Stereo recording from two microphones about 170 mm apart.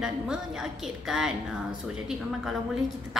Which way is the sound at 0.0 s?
5° right (ahead or behind).